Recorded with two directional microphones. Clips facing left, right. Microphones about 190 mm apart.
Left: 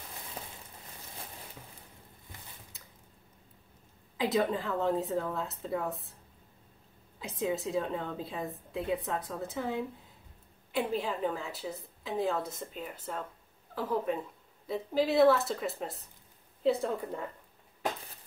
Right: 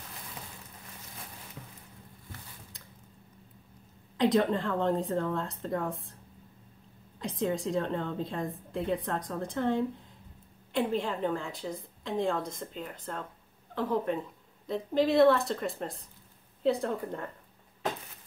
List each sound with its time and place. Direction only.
0.4 s a sound: 30° left (ahead or behind)
4.2 s a woman's voice: 5° left (ahead or behind)
7.2 s a woman's voice: 5° left (ahead or behind)